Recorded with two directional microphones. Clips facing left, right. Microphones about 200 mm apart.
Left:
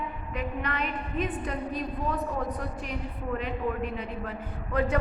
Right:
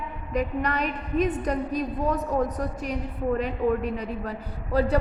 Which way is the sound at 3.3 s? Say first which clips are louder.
Right 4 dB; 40° right (ahead or behind).